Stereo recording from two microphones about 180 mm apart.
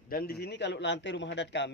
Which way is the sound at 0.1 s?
60° left (ahead or behind).